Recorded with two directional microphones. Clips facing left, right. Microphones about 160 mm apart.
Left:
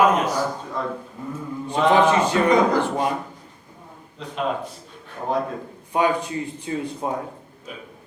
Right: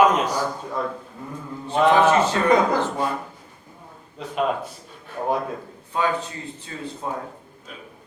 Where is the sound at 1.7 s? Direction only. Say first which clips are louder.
Right 1 dB; 15° left (ahead or behind).